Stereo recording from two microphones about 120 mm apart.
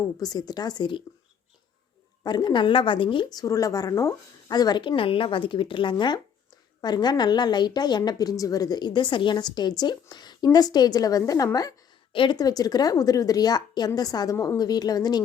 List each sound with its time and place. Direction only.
0.2 s a woman's voice: 35° left (ahead or behind)
2.2 s a woman's voice: 35° left (ahead or behind)
12.1 s a woman's voice: 40° left (ahead or behind)